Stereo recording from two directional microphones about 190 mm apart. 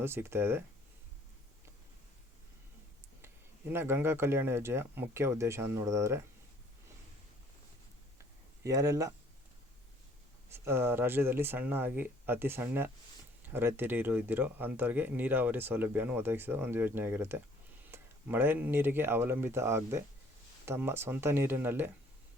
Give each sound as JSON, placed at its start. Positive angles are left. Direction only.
{"t": 0.0, "sound": "speech", "side_deg": -10}
{"t": 3.7, "sound": "speech", "side_deg": -10}
{"t": 8.6, "sound": "speech", "side_deg": -15}
{"t": 10.5, "sound": "speech", "side_deg": -15}